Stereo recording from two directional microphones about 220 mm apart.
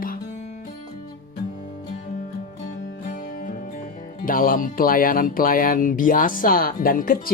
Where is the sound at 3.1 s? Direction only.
40° left (ahead or behind).